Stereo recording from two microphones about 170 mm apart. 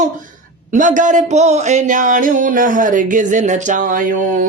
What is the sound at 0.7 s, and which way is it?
Speech, 50° right (ahead or behind).